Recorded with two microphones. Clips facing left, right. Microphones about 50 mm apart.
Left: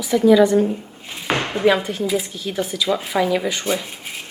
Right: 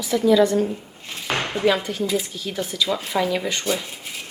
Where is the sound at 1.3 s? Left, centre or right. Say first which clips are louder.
Left 3 dB; left.